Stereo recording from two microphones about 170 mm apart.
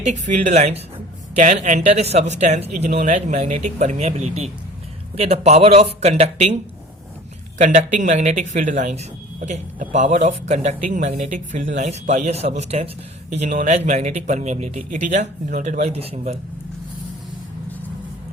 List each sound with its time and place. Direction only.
0.0 s speech: 45° right (ahead or behind)
7.6 s speech: 45° right (ahead or behind)